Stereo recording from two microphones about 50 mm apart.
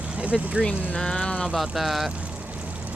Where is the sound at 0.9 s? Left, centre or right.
Left.